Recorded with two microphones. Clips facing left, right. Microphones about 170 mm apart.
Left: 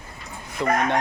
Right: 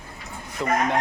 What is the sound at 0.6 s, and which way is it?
Speech, centre (ahead or behind).